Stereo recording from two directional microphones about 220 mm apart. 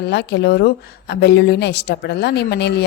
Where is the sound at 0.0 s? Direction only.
50° left (ahead or behind).